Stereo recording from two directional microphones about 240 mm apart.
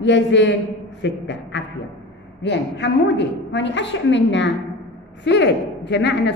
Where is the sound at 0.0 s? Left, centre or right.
Left.